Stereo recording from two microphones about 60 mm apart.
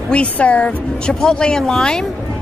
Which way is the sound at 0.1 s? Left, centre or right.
Left.